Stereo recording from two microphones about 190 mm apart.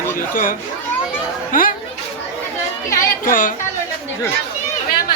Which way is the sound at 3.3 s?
45° left (ahead or behind).